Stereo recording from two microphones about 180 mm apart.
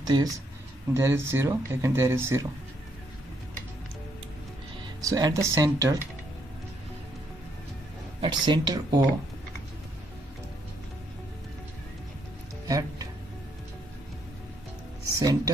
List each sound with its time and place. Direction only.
0.0 s speech: 25° right (ahead or behind)
5.0 s speech: 20° right (ahead or behind)
8.2 s speech: 25° right (ahead or behind)
12.6 s music: 20° right (ahead or behind)
15.1 s speech: 20° right (ahead or behind)